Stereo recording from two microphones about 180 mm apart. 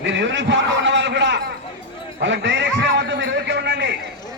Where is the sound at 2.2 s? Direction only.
85° right.